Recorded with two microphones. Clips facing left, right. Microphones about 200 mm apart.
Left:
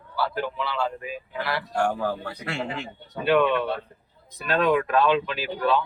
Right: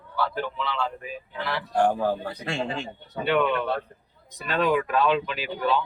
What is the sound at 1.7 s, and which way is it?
Speech, 20° right (ahead or behind).